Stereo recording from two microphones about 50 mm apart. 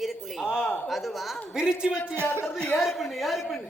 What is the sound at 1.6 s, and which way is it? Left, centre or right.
Speech, centre.